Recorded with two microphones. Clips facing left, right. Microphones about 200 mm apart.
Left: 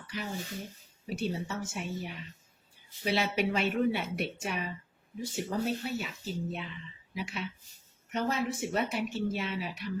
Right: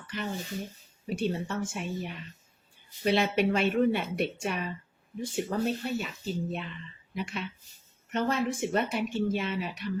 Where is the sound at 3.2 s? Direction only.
55° right (ahead or behind).